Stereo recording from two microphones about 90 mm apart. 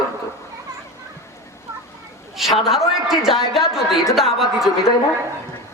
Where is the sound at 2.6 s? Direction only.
5° right (ahead or behind).